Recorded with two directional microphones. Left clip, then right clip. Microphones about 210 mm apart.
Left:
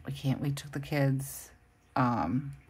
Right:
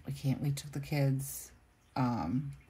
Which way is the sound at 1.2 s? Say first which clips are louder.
Left 2 dB; centre (ahead or behind).